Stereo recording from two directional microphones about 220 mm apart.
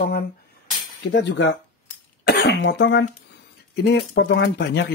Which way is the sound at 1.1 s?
55° left (ahead or behind).